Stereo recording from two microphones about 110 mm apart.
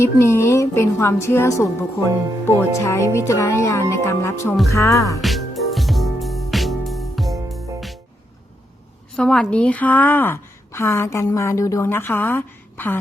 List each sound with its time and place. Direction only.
0.0 s a woman's voice: 25° left (ahead or behind)
5.2 s music: centre (ahead or behind)
9.1 s a woman's voice: 5° left (ahead or behind)